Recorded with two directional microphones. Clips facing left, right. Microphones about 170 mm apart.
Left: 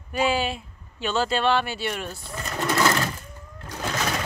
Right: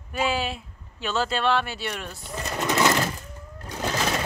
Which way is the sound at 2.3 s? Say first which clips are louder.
Even; 20° right (ahead or behind).